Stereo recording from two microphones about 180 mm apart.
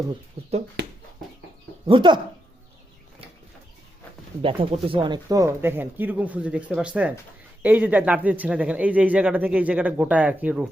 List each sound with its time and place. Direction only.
0.8 s speech: 60° right (ahead or behind)
1.9 s speech: 25° right (ahead or behind)
4.4 s speech: 30° right (ahead or behind); by 10.7 s 5° right (ahead or behind)